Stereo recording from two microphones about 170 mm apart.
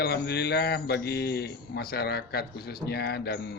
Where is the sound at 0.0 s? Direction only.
70° left (ahead or behind).